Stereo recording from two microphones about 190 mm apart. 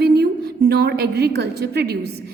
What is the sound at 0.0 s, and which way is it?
A woman's voice, 60° right (ahead or behind).